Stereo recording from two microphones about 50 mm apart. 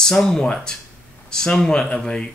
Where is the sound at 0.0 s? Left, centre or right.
Centre.